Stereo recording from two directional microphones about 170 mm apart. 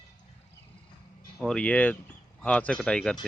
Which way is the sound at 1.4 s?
5° left (ahead or behind).